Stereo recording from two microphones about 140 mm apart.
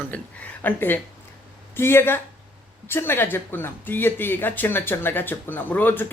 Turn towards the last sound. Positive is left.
turn(degrees=15)  # may be behind; listen again after turning